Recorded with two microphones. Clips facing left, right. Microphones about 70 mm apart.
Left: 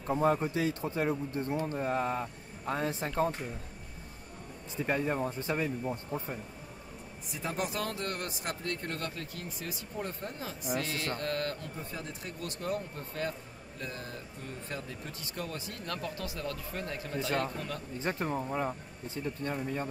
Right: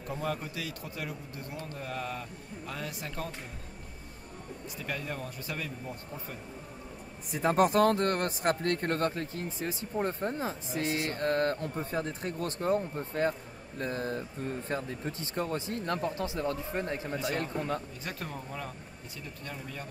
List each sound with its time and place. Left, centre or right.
0.0 s a man's voice: left
4.7 s a man's voice: left
7.3 s speech: right
18.0 s a man's voice: left